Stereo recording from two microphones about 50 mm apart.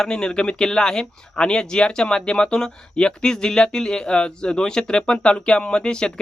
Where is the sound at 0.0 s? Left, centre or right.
Centre.